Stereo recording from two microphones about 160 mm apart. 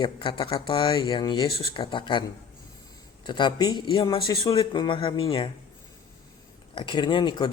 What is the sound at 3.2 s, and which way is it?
Speech, 30° left (ahead or behind).